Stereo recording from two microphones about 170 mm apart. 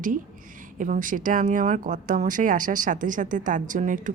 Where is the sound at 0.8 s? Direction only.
50° right (ahead or behind).